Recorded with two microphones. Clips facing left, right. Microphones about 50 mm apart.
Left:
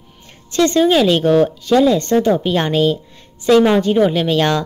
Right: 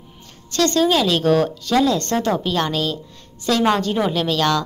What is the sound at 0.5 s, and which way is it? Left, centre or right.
Speech, centre.